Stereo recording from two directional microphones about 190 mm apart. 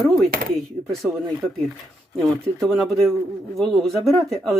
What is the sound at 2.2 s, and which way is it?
Speech, centre (ahead or behind).